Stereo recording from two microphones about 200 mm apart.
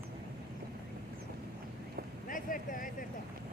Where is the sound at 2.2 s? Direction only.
40° left (ahead or behind).